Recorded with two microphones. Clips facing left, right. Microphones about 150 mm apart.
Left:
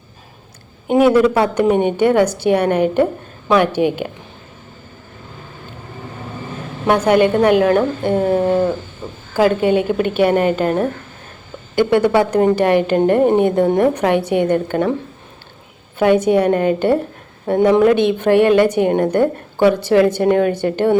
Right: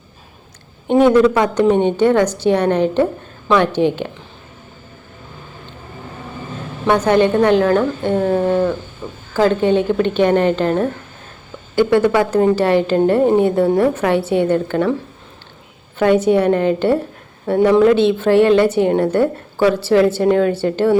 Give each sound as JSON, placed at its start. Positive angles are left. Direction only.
{"t": 0.9, "sound": "a woman's voice", "side_deg": 10}
{"t": 6.8, "sound": "a woman's voice", "side_deg": 10}
{"t": 16.0, "sound": "a woman's voice", "side_deg": 15}